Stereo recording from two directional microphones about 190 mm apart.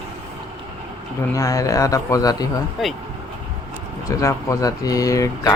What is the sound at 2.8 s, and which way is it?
Speech, centre (ahead or behind).